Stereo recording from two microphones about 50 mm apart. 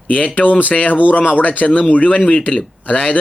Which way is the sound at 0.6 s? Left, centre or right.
Left.